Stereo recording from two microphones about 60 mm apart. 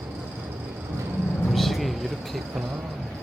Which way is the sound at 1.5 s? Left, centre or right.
Centre.